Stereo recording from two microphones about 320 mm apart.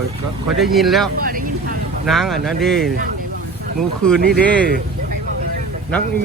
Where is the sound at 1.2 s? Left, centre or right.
Right.